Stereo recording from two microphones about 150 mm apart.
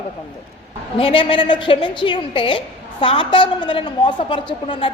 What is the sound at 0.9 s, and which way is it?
A woman's voice, 35° left (ahead or behind).